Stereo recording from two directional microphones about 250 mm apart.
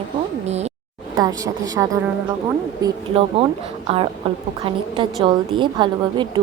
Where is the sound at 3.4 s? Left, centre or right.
Right.